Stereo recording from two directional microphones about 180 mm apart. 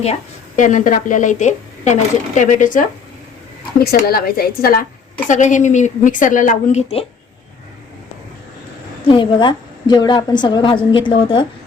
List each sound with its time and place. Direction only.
0.0 s a woman's voice: 40° left (ahead or behind)
3.8 s speech: 55° left (ahead or behind)
5.3 s a woman's voice: 45° left (ahead or behind)
9.0 s a woman's voice: 25° left (ahead or behind)